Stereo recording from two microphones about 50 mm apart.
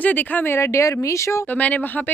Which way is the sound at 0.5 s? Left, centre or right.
Left.